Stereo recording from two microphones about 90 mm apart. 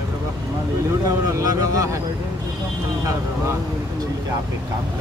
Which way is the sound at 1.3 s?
40° right (ahead or behind).